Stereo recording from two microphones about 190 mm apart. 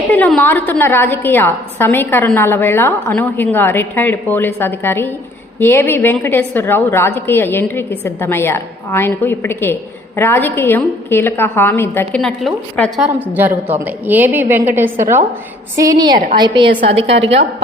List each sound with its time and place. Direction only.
0.3 s a woman's voice: 10° left (ahead or behind)
13.3 s a woman's voice: 10° right (ahead or behind)